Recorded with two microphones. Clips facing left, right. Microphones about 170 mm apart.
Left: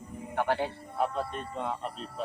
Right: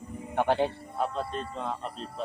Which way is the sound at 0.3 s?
20° right (ahead or behind).